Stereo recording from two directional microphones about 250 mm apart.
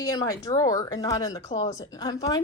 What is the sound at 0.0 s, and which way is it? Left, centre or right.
A woman's voice, centre.